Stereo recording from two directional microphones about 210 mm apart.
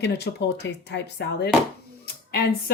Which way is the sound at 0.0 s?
55° left (ahead or behind).